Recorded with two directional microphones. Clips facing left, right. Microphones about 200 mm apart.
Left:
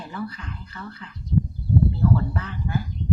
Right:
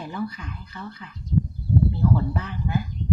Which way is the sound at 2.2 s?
15° right (ahead or behind).